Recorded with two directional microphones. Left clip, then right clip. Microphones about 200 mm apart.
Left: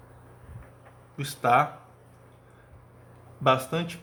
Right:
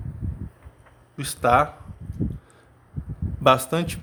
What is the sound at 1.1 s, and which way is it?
Speech, 45° right (ahead or behind).